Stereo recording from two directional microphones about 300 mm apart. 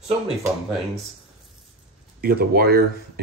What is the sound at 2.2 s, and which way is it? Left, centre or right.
Speech, right.